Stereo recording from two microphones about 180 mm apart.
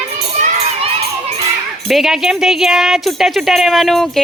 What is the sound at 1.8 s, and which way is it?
Speech, centre (ahead or behind).